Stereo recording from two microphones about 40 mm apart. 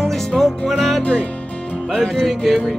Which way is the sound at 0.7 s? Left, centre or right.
Centre.